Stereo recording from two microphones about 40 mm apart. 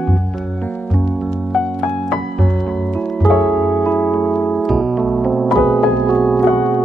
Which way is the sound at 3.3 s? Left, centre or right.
Centre.